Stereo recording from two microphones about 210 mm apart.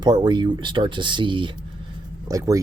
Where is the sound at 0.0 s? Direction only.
20° right (ahead or behind).